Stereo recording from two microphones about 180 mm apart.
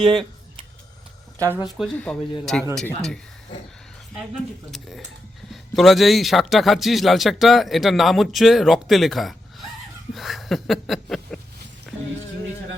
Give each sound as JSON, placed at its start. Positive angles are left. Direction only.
{"t": 0.0, "sound": "speech", "side_deg": -25}
{"t": 1.5, "sound": "a man's voice", "side_deg": -5}
{"t": 4.7, "sound": "a man's voice", "side_deg": 0}
{"t": 10.2, "sound": "a sound", "side_deg": 0}